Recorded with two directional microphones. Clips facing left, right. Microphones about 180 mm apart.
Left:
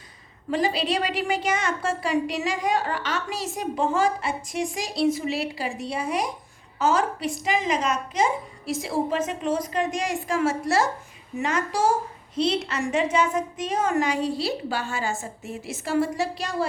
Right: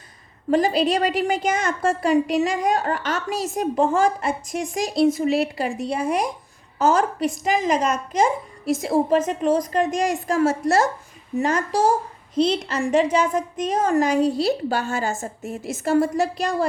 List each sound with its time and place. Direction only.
0.5 s a woman's voice: 45° right (ahead or behind)